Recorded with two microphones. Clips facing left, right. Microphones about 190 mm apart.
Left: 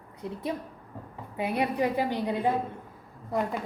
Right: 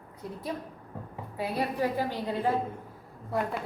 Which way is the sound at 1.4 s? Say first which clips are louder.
Left 2 dB; 20° left (ahead or behind).